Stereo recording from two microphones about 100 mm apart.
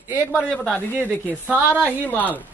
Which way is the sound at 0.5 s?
10° left (ahead or behind).